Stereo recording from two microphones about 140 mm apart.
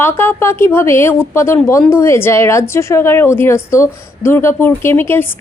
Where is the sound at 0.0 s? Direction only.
15° left (ahead or behind).